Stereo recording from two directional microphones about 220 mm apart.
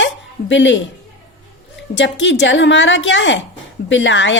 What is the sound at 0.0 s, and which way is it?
Hiccup, 55° left (ahead or behind).